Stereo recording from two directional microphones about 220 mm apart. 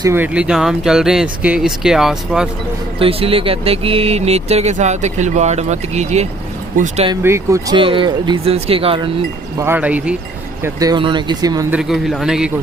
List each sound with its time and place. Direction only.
0.0 s speech: 10° right (ahead or behind)
3.0 s speech: 25° right (ahead or behind)
7.1 s speech: 10° right (ahead or behind)
9.6 s speech: 10° right (ahead or behind)
11.8 s speech: centre (ahead or behind)